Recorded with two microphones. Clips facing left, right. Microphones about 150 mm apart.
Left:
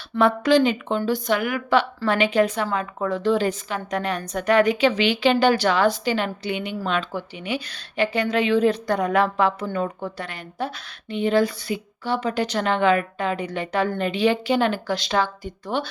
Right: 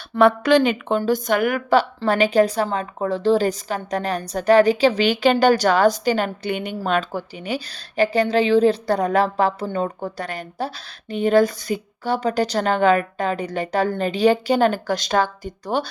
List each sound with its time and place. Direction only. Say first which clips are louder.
0.2 s a woman's voice: right 2 dB; 65° right (ahead or behind); by 15.9 s 40° right (ahead or behind)